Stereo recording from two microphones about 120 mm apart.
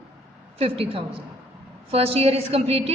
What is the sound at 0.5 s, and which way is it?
A woman's voice, 55° right (ahead or behind).